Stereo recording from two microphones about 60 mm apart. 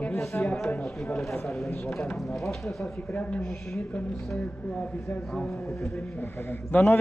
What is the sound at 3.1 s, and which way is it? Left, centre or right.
Speech, left.